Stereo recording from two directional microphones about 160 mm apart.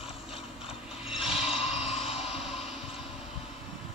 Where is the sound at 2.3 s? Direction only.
Centre (ahead or behind).